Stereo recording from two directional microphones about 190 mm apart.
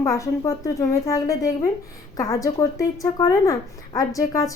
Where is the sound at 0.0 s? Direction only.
15° left (ahead or behind).